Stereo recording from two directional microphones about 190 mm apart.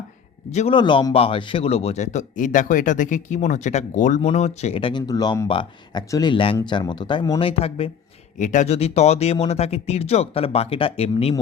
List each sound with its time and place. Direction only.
0.5 s a man's voice: 35° left (ahead or behind)
0.8 s a man's voice: 25° left (ahead or behind)
8.4 s a man's voice: 40° left (ahead or behind)